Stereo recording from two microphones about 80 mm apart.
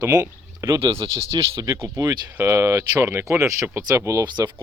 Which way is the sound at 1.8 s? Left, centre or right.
Right.